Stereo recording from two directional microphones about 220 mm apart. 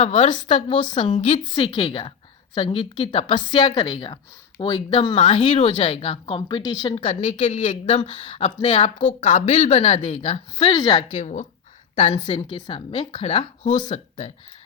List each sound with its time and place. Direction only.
0.0 s speech: 30° left (ahead or behind)
0.3 s speech: 20° left (ahead or behind)
8.1 s speech: 20° left (ahead or behind)
11.1 s speech: 30° left (ahead or behind)